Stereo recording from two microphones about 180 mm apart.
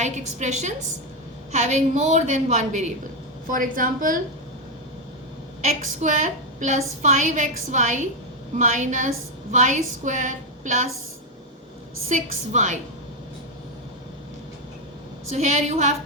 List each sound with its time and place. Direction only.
0.0 s a woman's voice: 40° right (ahead or behind)
5.6 s a woman's voice: 40° right (ahead or behind)
12.0 s a woman's voice: 40° right (ahead or behind)
15.3 s a woman's voice: 40° right (ahead or behind)